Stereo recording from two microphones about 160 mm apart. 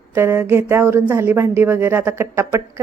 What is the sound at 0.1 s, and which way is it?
Speech, 15° right (ahead or behind).